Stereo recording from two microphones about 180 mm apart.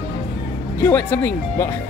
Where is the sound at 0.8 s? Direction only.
10° left (ahead or behind).